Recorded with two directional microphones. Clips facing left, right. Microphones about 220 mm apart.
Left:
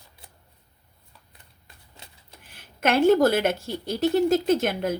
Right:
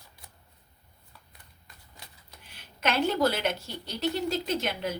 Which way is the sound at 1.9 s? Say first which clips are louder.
Left 2 dB; 25° left (ahead or behind).